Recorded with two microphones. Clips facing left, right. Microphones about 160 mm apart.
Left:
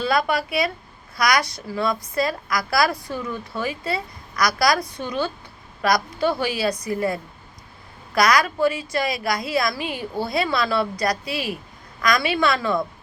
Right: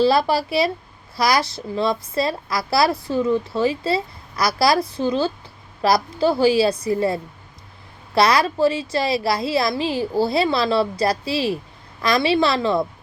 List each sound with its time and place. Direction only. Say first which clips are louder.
0.0 s a woman's voice: right 5 dB; 30° right (ahead or behind)